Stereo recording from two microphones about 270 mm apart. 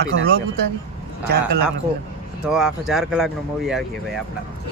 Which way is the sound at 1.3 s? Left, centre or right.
Right.